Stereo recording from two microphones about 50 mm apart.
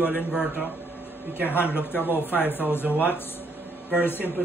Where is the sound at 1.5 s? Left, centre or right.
Left.